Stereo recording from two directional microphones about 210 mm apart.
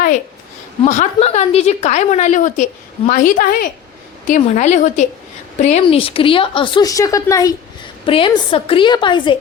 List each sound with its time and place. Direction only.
0.9 s a woman's voice: 30° left (ahead or behind)